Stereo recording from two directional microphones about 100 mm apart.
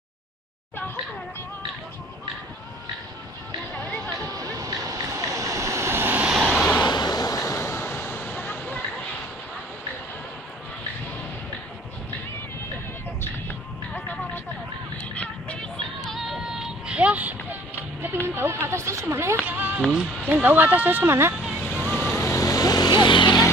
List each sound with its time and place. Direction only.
4.4 s vehicle: 35° right (ahead or behind); by 6.3 s 20° right (ahead or behind)
6.3 s vehicle: 5° right (ahead or behind)
6.8 s a sound: 45° left (ahead or behind); by 8.8 s 15° left (ahead or behind)
15.1 s music: 10° left (ahead or behind)
16.2 s a sound: 5° right (ahead or behind)
19.8 s a sound: 5° right (ahead or behind)
20.2 s speech: 15° right (ahead or behind)
21.4 s vehicle: centre (ahead or behind)
22.0 s vehicle: 15° left (ahead or behind)
22.3 s vehicle: 35° left (ahead or behind); by 23.4 s 50° left (ahead or behind)